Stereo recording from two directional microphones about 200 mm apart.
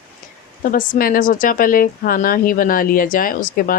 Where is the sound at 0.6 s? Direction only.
45° left (ahead or behind).